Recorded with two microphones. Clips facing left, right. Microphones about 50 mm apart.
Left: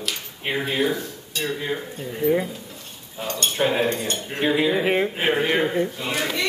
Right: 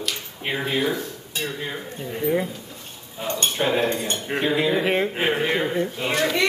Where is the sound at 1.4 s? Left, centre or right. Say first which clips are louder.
Left 2 dB; centre.